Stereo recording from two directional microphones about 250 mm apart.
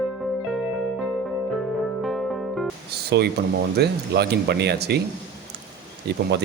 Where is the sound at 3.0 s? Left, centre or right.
Right.